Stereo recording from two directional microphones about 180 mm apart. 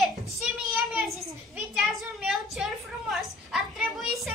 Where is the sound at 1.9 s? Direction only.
Centre (ahead or behind).